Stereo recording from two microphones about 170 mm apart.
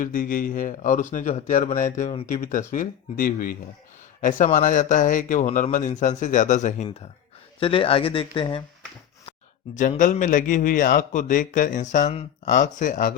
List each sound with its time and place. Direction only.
0.0 s speech: 55° left (ahead or behind)
6.8 s speech: 35° left (ahead or behind)
10.0 s speech: 50° left (ahead or behind)